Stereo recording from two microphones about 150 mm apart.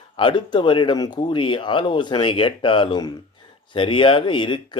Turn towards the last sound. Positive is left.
turn(degrees=35)  # may be behind; listen again after turning